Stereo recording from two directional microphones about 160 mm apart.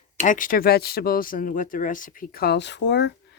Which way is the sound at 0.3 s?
55° left (ahead or behind).